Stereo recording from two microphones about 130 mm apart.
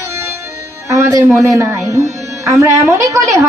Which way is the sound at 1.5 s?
25° right (ahead or behind).